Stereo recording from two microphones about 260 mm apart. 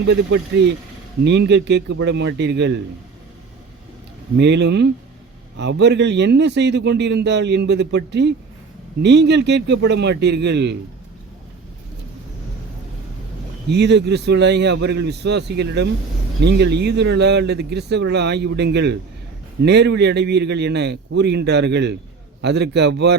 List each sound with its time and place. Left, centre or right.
0.0 s a man's voice: right
4.4 s a man's voice: right
13.7 s a man's voice: right